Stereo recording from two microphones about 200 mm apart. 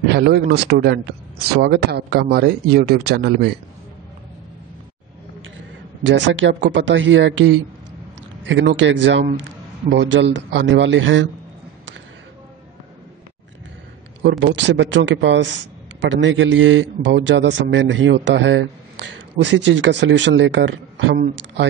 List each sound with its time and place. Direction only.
0.1 s speech: 55° right (ahead or behind)
6.0 s a man's voice: 70° right (ahead or behind)
14.4 s a man's voice: 65° right (ahead or behind)